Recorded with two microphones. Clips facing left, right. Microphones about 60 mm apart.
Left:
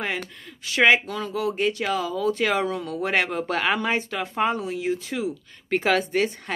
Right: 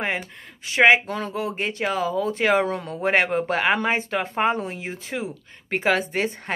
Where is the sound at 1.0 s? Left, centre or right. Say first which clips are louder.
Even; right.